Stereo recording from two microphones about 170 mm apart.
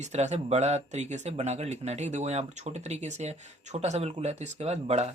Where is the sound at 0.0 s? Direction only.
40° right (ahead or behind).